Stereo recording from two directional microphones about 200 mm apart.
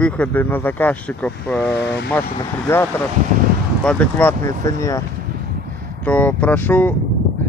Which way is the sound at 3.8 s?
10° left (ahead or behind).